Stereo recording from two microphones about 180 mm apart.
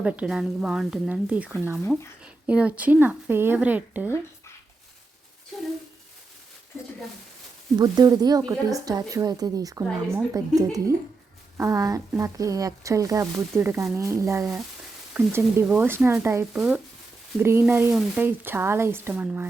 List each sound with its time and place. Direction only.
0.0 s a woman's voice: 5° right (ahead or behind)
7.8 s a woman's voice: 20° right (ahead or behind)